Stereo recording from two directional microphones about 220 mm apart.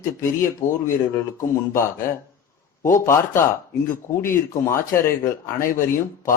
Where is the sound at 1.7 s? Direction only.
10° left (ahead or behind).